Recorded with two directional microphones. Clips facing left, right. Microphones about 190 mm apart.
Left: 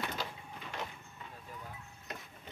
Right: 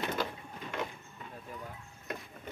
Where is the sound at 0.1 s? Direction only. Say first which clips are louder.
Right 6 dB; 50° right (ahead or behind).